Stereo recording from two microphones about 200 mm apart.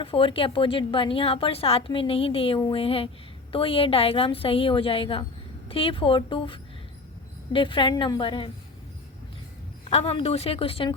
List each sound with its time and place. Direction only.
0.0 s a woman's voice: 25° left (ahead or behind)
9.9 s a woman's voice: 30° left (ahead or behind)